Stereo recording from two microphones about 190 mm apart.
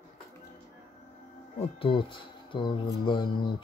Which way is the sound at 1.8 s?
25° left (ahead or behind).